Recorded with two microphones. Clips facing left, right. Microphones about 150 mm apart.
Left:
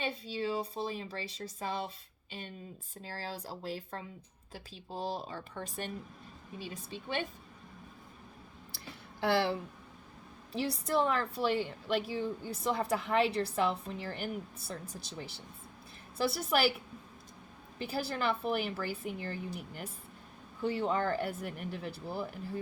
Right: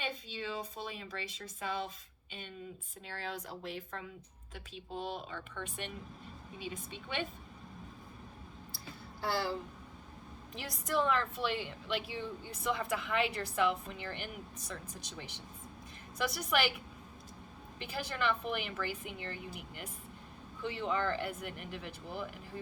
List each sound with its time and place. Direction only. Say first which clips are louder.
0.0 s a woman's voice: left 5 dB; 35° left (ahead or behind)
3.0 s a woman's voice: left 1 dB; 35° left (ahead or behind)
9.2 s speech: left 5 dB; 70° left (ahead or behind)
10.5 s a woman's voice: left 4 dB; 35° left (ahead or behind)